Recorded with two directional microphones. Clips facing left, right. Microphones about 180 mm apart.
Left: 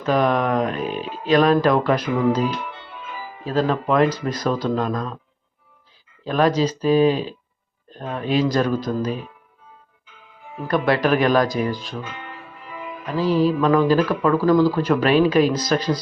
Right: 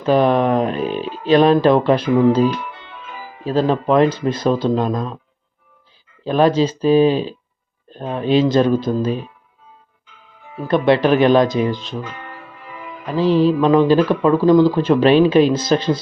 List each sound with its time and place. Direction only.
0.0 s speech: 30° right (ahead or behind)
6.2 s speech: 30° right (ahead or behind)
10.7 s speech: 25° right (ahead or behind)
13.1 s speech: 25° right (ahead or behind)